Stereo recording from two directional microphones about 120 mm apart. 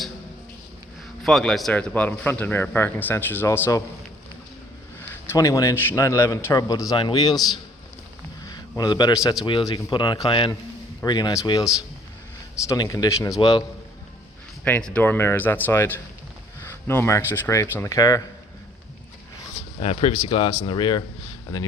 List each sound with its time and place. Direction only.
1.2 s a man's voice: centre (ahead or behind); by 3.8 s 25° left (ahead or behind)
5.1 s a man's voice: 20° left (ahead or behind)
8.8 s speech: 35° left (ahead or behind)
9.4 s speech: 40° left (ahead or behind)
12.6 s a man's voice: 30° left (ahead or behind)
14.6 s a man's voice: 10° left (ahead or behind); by 18.2 s 30° left (ahead or behind)
19.8 s speech: 60° left (ahead or behind); by 21.0 s 40° left (ahead or behind)